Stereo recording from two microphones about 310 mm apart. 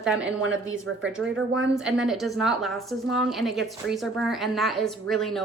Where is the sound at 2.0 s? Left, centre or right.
Centre.